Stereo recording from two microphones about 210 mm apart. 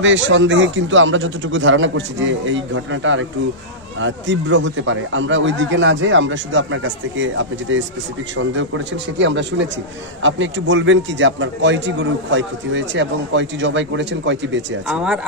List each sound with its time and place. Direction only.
0.0 s a man's voice: 65° right (ahead or behind)
14.9 s speech: 5° right (ahead or behind)